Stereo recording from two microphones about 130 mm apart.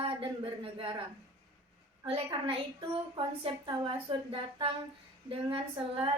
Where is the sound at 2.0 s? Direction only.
45° right (ahead or behind).